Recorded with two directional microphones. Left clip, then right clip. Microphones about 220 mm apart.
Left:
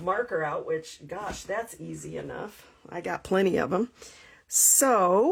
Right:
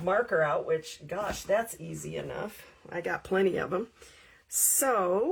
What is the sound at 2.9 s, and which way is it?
Speech, 35° left (ahead or behind).